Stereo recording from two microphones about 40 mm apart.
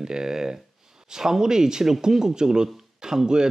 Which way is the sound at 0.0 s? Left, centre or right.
Centre.